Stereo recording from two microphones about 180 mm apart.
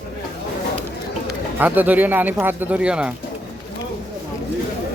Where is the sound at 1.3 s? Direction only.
10° right (ahead or behind).